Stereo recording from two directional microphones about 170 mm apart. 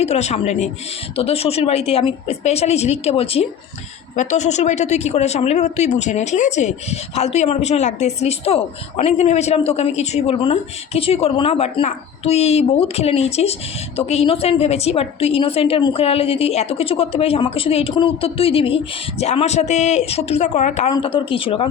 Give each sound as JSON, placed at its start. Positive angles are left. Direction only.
{"t": 0.0, "sound": "speech", "side_deg": 40}
{"t": 20.9, "sound": "speech", "side_deg": 30}